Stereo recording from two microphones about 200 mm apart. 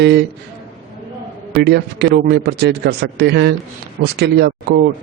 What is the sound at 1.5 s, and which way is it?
Speech, 55° right (ahead or behind).